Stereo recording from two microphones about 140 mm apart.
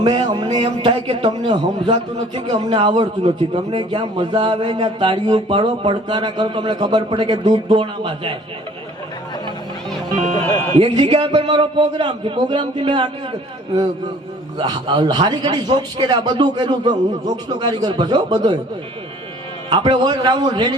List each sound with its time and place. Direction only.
0.0 s a man's voice: 35° right (ahead or behind)
10.4 s speech: 20° left (ahead or behind)
10.8 s a man's voice: 35° right (ahead or behind)
14.6 s a man's voice: 35° right (ahead or behind)
19.7 s a man's voice: 35° right (ahead or behind)